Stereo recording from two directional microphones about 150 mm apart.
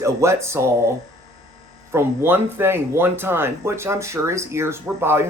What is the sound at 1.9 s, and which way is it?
Speech, 15° right (ahead or behind).